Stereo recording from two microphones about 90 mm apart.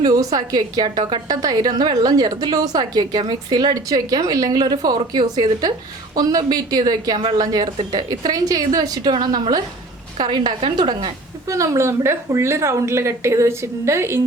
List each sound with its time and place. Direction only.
0.0 s a woman's voice: 45° right (ahead or behind)
10.2 s a woman's voice: 60° right (ahead or behind)
11.4 s speech: 35° right (ahead or behind)